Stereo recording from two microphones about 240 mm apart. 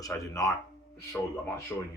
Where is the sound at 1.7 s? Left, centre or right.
Centre.